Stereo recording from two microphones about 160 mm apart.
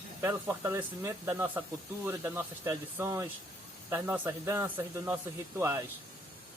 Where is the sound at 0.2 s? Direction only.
15° right (ahead or behind).